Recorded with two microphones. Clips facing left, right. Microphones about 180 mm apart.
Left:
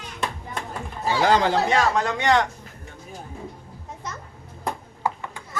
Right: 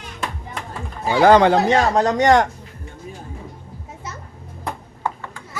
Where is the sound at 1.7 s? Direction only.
35° right (ahead or behind).